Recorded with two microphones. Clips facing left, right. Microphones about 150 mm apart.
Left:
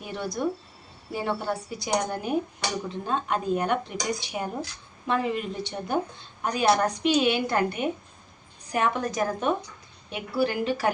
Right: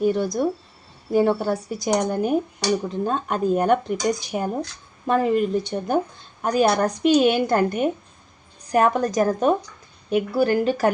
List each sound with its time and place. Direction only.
0.0 s a woman's voice: 40° right (ahead or behind)